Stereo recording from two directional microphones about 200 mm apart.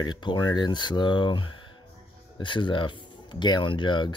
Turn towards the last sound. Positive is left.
turn(degrees=25)  # may be behind; listen again after turning